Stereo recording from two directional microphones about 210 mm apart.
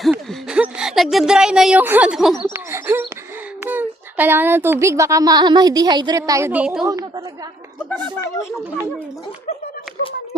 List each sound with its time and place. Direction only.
0.0 s speech: centre (ahead or behind)
2.4 s a sound: 10° right (ahead or behind)
3.6 s speech: 10° right (ahead or behind)
6.8 s a woman's voice: 15° right (ahead or behind)